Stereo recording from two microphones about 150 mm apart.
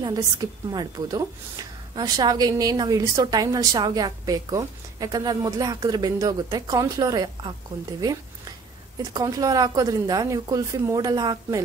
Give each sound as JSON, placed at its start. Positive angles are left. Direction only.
{"t": 0.0, "sound": "a woman's voice", "side_deg": -25}
{"t": 8.0, "sound": "a sound", "side_deg": -25}
{"t": 9.1, "sound": "a woman's voice", "side_deg": -25}